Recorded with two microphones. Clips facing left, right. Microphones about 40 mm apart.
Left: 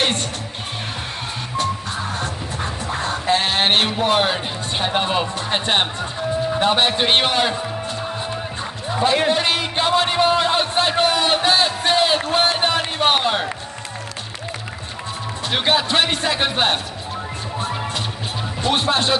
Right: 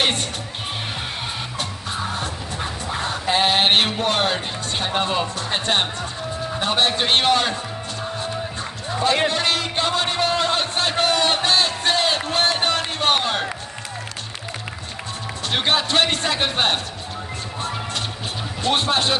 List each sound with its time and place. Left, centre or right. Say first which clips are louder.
2.9 s music: left 3 dB; centre
4.7 s a man's voice: left 2 dB; centre
9.3 s a man's voice: left 2 dB; centre
15.5 s speech: left 1 dB; centre
17.6 s music: left 2 dB; centre
18.6 s speech: left 1 dB; centre